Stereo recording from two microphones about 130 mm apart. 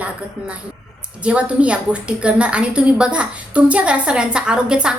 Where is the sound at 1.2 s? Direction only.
10° right (ahead or behind).